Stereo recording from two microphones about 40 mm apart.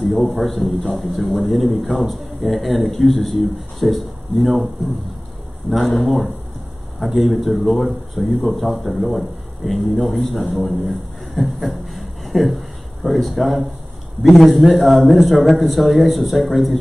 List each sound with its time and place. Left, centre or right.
0.0 s speech: centre
10.9 s a sound: centre
14.2 s speech: centre